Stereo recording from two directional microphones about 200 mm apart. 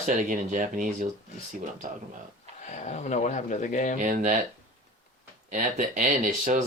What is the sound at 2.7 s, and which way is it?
Speech, 35° left (ahead or behind).